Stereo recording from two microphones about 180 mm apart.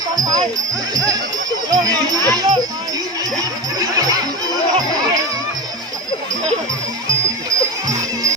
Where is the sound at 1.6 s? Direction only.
20° right (ahead or behind).